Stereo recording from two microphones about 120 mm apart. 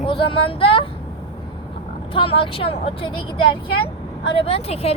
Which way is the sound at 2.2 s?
50° left (ahead or behind).